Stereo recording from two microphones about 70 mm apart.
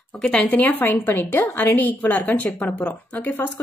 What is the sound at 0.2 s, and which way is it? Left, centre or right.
A woman's voice, centre.